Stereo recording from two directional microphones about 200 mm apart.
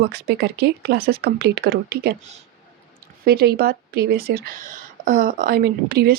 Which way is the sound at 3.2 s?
50° right (ahead or behind).